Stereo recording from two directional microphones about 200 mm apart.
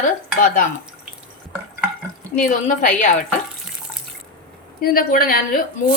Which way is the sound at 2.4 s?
40° left (ahead or behind).